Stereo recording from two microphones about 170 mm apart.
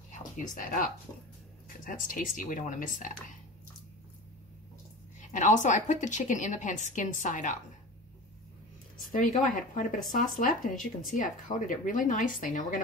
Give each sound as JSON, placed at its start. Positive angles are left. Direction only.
{"t": 0.4, "sound": "a woman's voice", "side_deg": 50}
{"t": 1.9, "sound": "a woman's voice", "side_deg": 55}
{"t": 5.3, "sound": "a woman's voice", "side_deg": 45}
{"t": 9.0, "sound": "a woman's voice", "side_deg": 50}